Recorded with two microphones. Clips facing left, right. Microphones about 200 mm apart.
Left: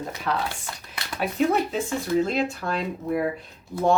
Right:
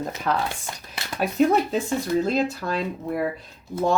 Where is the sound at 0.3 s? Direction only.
40° right (ahead or behind).